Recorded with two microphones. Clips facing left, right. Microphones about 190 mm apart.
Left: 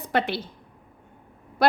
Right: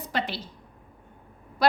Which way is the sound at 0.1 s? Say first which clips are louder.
Left 6 dB; 55° left (ahead or behind).